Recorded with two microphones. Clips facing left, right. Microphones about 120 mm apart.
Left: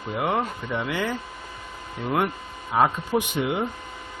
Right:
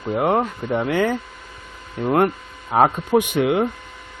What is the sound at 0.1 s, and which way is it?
Speech, 45° right (ahead or behind).